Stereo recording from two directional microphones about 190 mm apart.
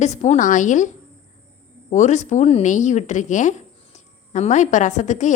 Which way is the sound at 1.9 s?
40° left (ahead or behind).